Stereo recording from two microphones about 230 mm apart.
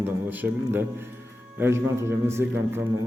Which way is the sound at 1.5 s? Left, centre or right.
Centre.